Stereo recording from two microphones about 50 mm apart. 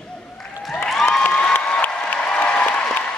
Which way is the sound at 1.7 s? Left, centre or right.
Left.